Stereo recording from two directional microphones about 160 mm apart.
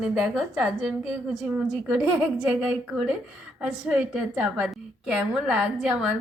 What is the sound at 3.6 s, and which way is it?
A woman's voice, 5° right (ahead or behind).